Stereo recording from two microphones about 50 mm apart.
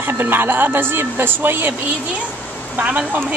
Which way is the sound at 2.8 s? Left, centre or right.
Right.